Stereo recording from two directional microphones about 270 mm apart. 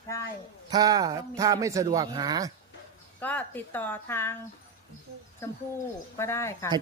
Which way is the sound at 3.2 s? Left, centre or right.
Centre.